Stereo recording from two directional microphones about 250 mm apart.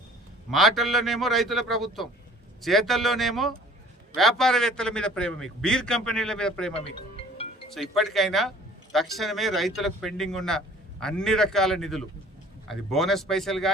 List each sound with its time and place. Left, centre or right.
0.5 s a man's voice: centre
6.7 s music: left
7.7 s a man's voice: centre